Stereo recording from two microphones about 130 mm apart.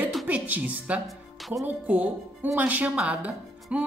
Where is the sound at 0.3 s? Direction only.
10° right (ahead or behind).